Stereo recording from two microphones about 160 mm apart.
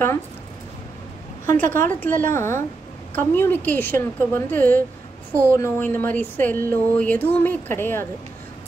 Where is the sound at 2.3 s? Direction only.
15° left (ahead or behind).